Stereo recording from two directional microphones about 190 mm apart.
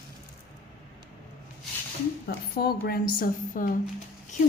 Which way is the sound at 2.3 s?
55° left (ahead or behind).